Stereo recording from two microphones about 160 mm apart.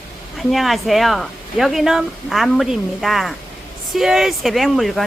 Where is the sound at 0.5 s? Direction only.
Centre (ahead or behind).